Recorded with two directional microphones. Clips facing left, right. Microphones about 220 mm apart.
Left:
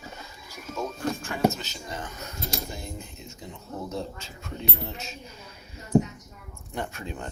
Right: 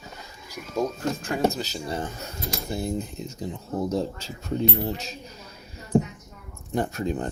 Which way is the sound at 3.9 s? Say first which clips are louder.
Right 7 dB; 35° right (ahead or behind).